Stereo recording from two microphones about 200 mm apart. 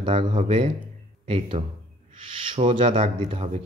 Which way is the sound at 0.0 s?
25° right (ahead or behind).